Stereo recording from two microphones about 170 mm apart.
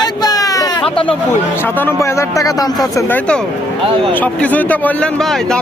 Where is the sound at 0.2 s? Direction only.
20° left (ahead or behind).